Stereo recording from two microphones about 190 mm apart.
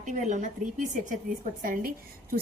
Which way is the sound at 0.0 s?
40° right (ahead or behind).